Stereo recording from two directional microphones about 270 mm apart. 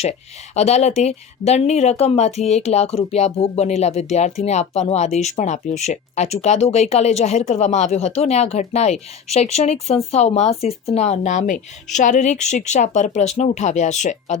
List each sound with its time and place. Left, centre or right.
0.0 s speech: left